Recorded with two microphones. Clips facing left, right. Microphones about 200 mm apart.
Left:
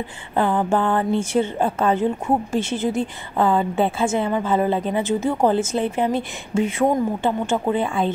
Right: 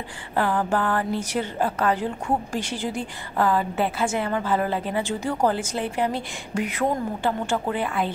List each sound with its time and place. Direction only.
0.4 s a woman's voice: 25° left (ahead or behind)